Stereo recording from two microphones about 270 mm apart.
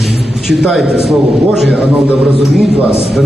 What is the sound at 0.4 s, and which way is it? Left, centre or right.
A man's voice, centre.